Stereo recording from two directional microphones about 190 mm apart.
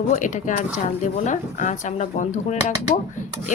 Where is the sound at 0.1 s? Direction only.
40° left (ahead or behind).